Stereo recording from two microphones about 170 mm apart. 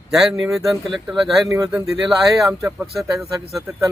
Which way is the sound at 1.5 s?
20° right (ahead or behind).